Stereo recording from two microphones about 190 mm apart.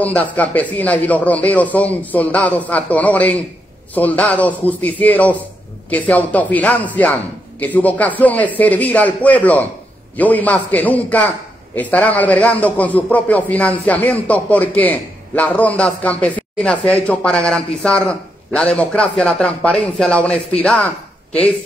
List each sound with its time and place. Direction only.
0.0 s a man's voice: 10° left (ahead or behind)